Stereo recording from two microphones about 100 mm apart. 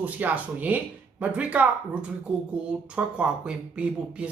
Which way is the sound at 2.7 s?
10° right (ahead or behind).